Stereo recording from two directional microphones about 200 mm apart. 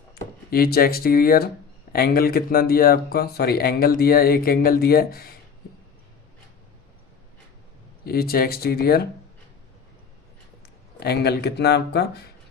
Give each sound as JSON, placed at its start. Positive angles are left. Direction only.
{"t": 0.5, "sound": "speech", "side_deg": 50}
{"t": 8.0, "sound": "speech", "side_deg": 50}
{"t": 11.0, "sound": "speech", "side_deg": 55}